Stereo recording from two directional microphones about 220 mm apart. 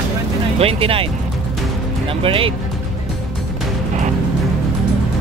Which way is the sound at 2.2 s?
25° right (ahead or behind).